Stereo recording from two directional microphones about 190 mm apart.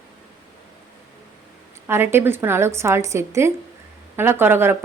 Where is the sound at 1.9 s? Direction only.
10° right (ahead or behind).